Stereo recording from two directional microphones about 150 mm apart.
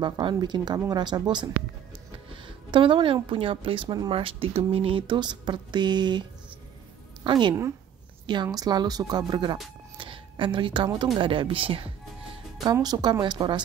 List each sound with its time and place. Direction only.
0.0 s a woman's voice: 30° right (ahead or behind)
7.2 s a woman's voice: 30° right (ahead or behind)
9.9 s a sound: 35° right (ahead or behind)
11.1 s a woman's voice: 35° right (ahead or behind)
12.7 s speech: 25° right (ahead or behind)